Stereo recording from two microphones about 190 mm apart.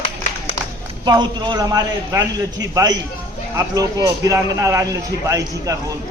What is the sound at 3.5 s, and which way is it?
A man's voice, 20° right (ahead or behind).